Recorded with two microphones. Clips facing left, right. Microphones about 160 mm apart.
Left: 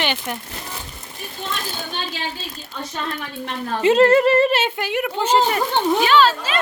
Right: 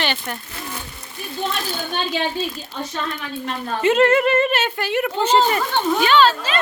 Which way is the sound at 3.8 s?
30° left (ahead or behind).